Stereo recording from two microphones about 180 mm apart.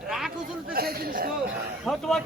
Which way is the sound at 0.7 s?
55° right (ahead or behind).